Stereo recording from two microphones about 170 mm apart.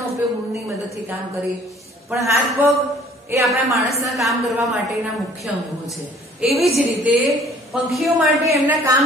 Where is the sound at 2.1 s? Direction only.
15° right (ahead or behind).